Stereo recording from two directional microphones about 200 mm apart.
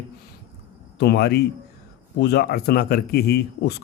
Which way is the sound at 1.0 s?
55° left (ahead or behind).